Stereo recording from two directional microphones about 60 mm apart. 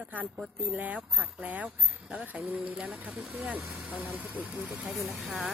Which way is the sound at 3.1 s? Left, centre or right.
Centre.